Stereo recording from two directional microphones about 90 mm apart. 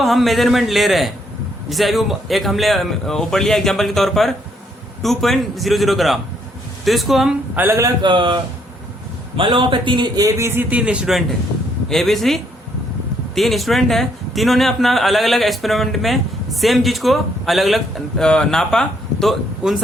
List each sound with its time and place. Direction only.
0.0 s a man's voice: centre (ahead or behind)
7.5 s speech: 25° right (ahead or behind)
8.0 s a man's voice: 60° right (ahead or behind)
9.4 s a man's voice: 65° right (ahead or behind)
10.2 s speech: 35° right (ahead or behind)
10.7 s speech: 15° right (ahead or behind)
11.9 s a man's voice: 5° left (ahead or behind)